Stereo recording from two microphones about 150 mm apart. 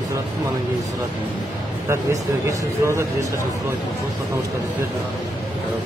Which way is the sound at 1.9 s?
20° right (ahead or behind).